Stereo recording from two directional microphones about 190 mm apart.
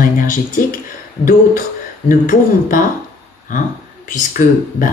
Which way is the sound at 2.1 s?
45° left (ahead or behind).